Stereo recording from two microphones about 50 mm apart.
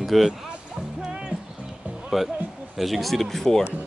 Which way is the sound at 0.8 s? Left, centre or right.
Centre.